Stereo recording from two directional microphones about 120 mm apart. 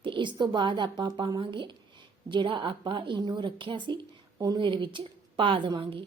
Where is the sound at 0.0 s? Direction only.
40° right (ahead or behind).